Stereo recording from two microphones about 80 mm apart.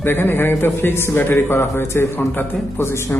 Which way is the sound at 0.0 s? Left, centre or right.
Left.